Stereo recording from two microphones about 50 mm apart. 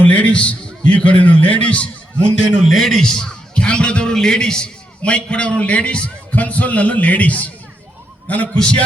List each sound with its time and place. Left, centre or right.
0.0 s a man's voice: left
2.4 s a man's voice: centre; by 7.5 s left
8.5 s a man's voice: centre